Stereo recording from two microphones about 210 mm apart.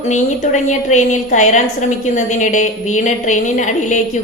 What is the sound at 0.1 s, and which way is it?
A woman's voice, 35° left (ahead or behind).